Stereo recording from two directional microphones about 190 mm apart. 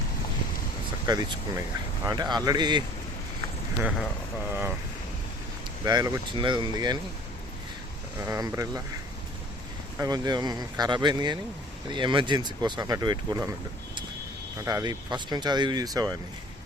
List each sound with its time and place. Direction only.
1.0 s speech: 20° right (ahead or behind)
3.8 s speech: 5° right (ahead or behind)
5.8 s speech: 20° right (ahead or behind)
8.3 s speech: 15° right (ahead or behind)
10.0 s speech: 20° right (ahead or behind)